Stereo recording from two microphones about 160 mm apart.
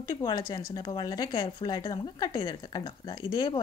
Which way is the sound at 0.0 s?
20° left (ahead or behind).